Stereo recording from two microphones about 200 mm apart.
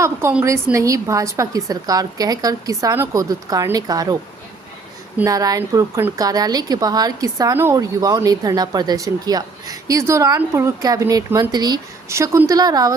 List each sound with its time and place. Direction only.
0.0 s a woman's voice: 10° right (ahead or behind)